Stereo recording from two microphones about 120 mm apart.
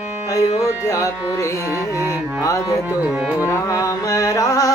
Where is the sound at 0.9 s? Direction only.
25° left (ahead or behind).